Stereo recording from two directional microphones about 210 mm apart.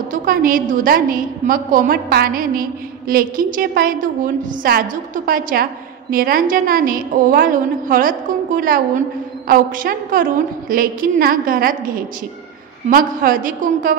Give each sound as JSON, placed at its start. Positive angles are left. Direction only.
{"t": 0.1, "sound": "a woman's voice", "side_deg": -40}